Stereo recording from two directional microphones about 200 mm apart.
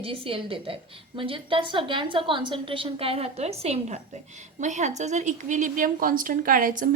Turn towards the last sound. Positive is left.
turn(degrees=-45)  # may be behind; listen again after turning